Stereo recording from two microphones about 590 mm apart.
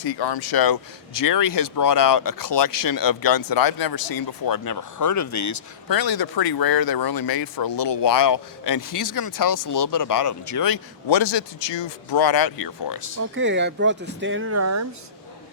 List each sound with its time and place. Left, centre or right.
0.0 s speech: left
13.3 s speech: centre